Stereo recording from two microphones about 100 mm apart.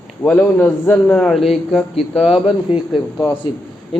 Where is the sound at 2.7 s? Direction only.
75° left (ahead or behind).